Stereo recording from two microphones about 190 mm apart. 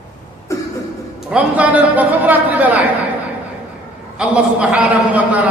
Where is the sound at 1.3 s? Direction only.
5° right (ahead or behind).